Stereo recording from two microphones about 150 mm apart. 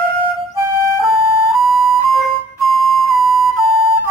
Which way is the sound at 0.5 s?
20° right (ahead or behind).